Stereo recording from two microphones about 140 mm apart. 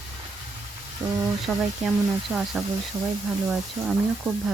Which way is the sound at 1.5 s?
5° right (ahead or behind).